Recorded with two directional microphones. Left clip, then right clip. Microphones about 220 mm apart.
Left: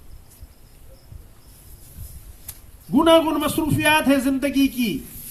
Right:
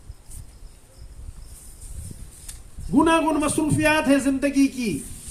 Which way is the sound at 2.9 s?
45° left (ahead or behind).